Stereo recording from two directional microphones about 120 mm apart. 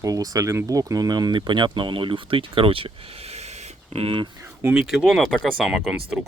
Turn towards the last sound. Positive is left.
turn(degrees=-5)  # may be behind; listen again after turning